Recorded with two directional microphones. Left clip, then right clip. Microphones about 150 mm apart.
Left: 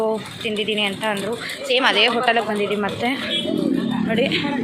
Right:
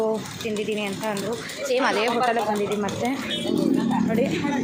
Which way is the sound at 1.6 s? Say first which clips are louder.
Left 5 dB; 15° right (ahead or behind).